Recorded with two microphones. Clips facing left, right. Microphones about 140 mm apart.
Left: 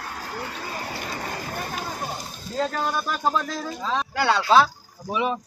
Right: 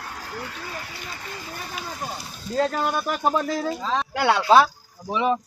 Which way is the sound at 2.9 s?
15° right (ahead or behind).